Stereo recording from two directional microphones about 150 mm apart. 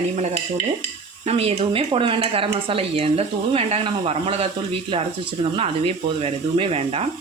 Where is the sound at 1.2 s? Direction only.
45° right (ahead or behind).